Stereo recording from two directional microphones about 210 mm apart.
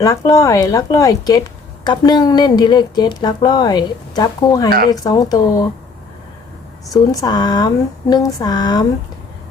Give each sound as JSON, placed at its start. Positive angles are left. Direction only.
{"t": 0.0, "sound": "speech", "side_deg": 15}
{"t": 6.9, "sound": "speech", "side_deg": 15}